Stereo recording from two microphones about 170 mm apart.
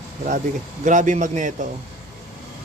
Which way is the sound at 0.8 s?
45° right (ahead or behind).